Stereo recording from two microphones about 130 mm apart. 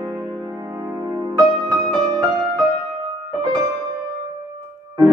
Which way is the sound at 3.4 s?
35° right (ahead or behind).